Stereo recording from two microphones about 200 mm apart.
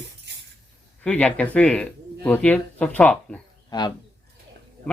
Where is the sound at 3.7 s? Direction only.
20° left (ahead or behind).